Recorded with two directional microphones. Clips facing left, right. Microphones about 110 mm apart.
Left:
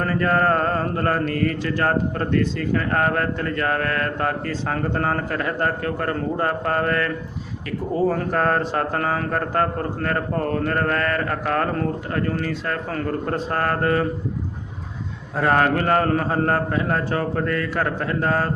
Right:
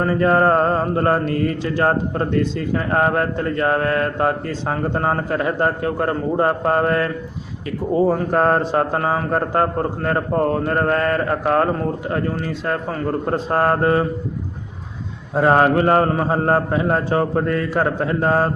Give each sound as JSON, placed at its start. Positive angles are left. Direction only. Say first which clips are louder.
{"t": 0.0, "sound": "speech", "louder": "right 4 dB", "side_deg": -20}
{"t": 15.4, "sound": "speech", "louder": "right 4 dB", "side_deg": -25}